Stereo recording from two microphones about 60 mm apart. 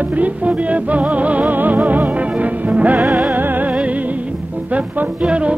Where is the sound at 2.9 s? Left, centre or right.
Centre.